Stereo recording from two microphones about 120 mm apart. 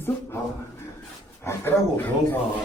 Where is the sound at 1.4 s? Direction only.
20° left (ahead or behind).